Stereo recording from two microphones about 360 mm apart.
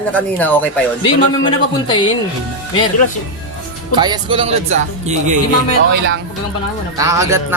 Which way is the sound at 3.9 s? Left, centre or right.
Centre.